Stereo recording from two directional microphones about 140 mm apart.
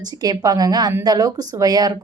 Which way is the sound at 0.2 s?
25° right (ahead or behind).